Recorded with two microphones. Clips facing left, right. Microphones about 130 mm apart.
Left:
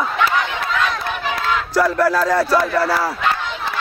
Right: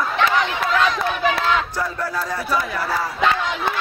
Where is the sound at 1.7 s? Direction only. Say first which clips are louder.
Left 9 dB; 90° left.